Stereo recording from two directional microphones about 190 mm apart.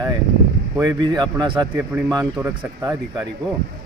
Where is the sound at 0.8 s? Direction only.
20° right (ahead or behind).